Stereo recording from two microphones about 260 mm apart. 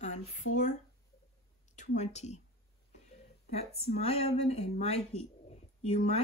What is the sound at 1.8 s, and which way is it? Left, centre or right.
Speech, left.